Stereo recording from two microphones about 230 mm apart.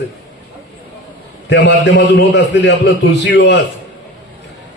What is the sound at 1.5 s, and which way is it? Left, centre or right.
A man's voice, left.